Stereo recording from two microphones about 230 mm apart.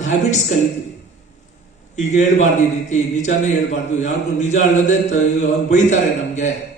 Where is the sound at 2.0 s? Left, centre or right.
Left.